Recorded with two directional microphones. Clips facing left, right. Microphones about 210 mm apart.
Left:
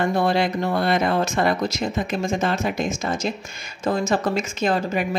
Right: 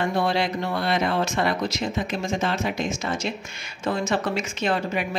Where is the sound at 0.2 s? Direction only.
50° left (ahead or behind).